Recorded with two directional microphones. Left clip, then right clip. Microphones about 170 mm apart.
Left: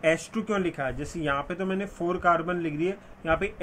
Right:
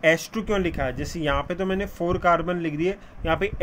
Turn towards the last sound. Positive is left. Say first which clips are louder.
# right 2 dB
turn(degrees=-50)  # may be behind; listen again after turning